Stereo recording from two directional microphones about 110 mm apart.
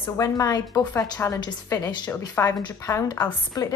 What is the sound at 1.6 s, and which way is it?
Speech, 35° left (ahead or behind).